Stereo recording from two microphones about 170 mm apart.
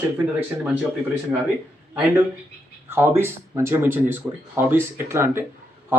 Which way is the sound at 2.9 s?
15° right (ahead or behind).